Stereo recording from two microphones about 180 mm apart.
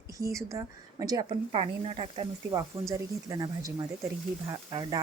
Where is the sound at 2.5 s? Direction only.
20° right (ahead or behind).